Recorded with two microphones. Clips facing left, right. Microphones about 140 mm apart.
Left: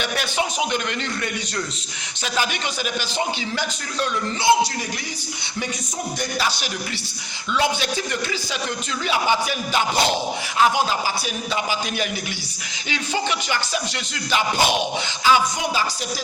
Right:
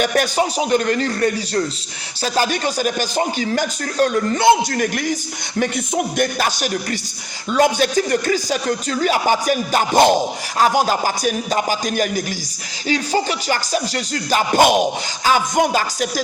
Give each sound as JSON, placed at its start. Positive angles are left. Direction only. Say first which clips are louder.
{"t": 0.0, "sound": "a man's voice", "louder": "right 7 dB", "side_deg": -45}
{"t": 6.1, "sound": "speech", "louder": "right 6 dB", "side_deg": -50}